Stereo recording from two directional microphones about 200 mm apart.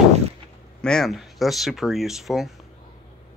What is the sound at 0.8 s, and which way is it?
Speech, centre (ahead or behind).